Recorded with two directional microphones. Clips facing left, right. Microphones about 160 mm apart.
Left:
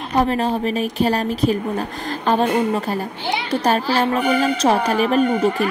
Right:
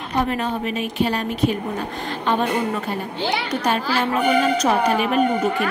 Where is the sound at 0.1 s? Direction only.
35° left (ahead or behind).